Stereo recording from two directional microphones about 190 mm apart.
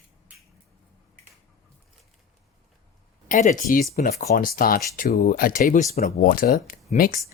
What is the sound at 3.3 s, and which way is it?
Speech, 40° left (ahead or behind).